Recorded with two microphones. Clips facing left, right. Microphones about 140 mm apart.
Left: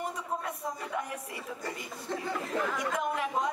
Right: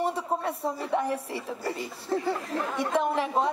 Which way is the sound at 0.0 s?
30° right (ahead or behind).